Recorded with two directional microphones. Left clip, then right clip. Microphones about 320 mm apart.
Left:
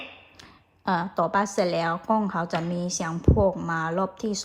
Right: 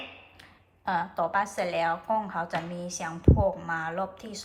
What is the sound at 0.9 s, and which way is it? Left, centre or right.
Speech, centre.